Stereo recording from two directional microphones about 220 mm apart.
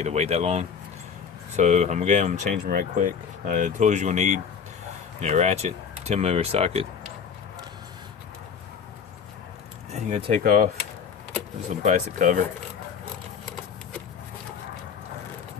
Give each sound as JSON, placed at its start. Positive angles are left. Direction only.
{"t": 0.0, "sound": "speech", "side_deg": -30}
{"t": 9.9, "sound": "speech", "side_deg": -30}
{"t": 11.8, "sound": "speech", "side_deg": -35}